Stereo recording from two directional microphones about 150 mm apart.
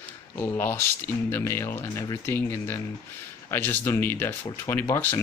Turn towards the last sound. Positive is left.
turn(degrees=15)  # may be behind; listen again after turning